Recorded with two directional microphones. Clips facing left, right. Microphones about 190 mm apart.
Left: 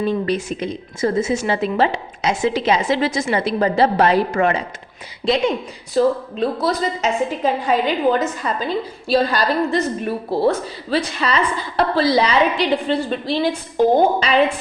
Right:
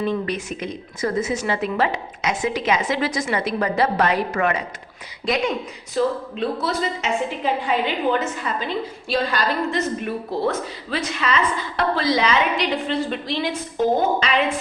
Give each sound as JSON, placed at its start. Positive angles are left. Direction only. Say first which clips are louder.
{"t": 0.0, "sound": "a woman's voice", "louder": "left 4 dB", "side_deg": 30}
{"t": 6.0, "sound": "a woman's voice", "louder": "left 5 dB", "side_deg": 35}